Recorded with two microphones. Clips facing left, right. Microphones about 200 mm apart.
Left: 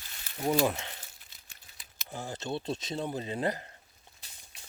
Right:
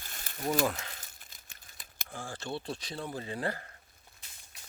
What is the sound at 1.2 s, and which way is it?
Crumpling, 45° right (ahead or behind).